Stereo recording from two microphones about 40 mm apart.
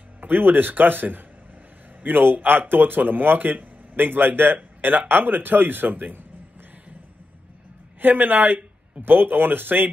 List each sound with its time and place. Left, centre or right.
0.2 s speech: right
8.0 s speech: right